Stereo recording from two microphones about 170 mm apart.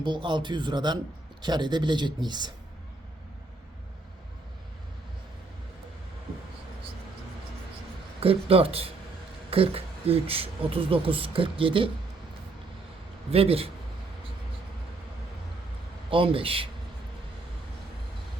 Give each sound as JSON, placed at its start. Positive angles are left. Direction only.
{"t": 0.0, "sound": "speech", "side_deg": -30}
{"t": 8.2, "sound": "speech", "side_deg": -35}
{"t": 13.3, "sound": "speech", "side_deg": -35}
{"t": 16.0, "sound": "speech", "side_deg": -30}